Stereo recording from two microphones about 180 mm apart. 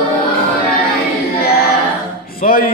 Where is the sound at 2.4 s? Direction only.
55° left (ahead or behind).